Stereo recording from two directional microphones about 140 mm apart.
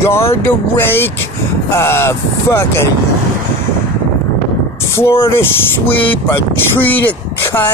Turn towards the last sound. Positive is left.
turn(degrees=15)  # may be behind; listen again after turning